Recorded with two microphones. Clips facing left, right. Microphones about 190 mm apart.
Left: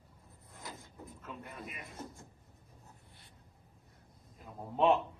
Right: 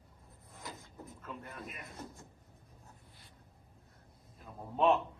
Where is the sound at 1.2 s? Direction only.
5° left (ahead or behind).